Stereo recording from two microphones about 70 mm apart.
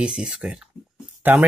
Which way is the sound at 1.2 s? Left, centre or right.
Right.